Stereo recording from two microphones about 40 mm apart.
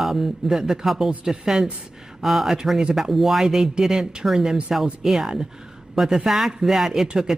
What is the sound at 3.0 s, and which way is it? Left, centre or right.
Speech, centre.